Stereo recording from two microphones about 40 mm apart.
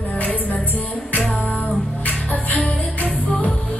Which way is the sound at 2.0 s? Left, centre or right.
Left.